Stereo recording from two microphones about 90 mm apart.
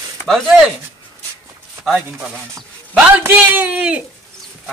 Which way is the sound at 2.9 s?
15° right (ahead or behind).